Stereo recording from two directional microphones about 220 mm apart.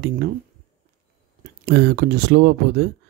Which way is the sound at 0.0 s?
45° right (ahead or behind).